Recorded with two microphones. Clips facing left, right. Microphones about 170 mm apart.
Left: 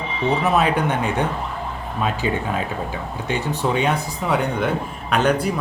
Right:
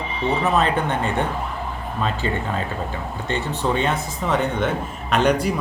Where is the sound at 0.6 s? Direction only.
15° left (ahead or behind).